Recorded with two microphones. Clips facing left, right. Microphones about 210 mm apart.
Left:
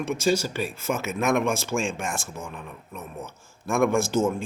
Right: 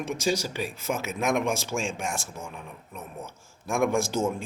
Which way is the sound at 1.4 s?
55° left (ahead or behind).